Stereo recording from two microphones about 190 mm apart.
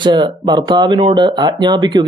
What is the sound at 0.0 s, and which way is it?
Speech, 20° right (ahead or behind).